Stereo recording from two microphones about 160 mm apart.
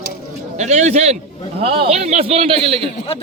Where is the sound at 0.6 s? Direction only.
45° right (ahead or behind).